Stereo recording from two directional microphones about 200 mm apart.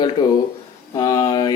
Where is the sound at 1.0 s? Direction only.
20° left (ahead or behind).